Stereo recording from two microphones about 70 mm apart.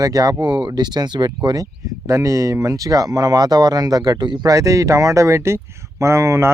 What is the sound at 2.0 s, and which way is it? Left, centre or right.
Speech, right.